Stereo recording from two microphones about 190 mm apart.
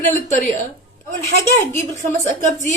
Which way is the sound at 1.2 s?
15° left (ahead or behind).